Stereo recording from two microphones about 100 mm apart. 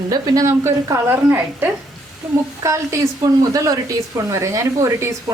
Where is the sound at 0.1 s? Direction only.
40° right (ahead or behind).